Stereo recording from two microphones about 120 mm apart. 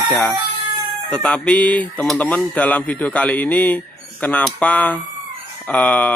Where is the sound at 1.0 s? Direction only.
5° left (ahead or behind).